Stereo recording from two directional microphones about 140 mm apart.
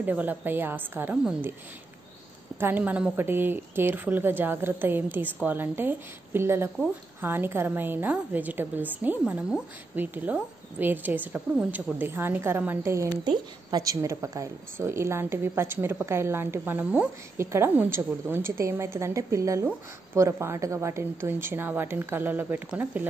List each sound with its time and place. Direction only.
0.0 s a woman's voice: 10° right (ahead or behind)
2.6 s a woman's voice: 10° right (ahead or behind)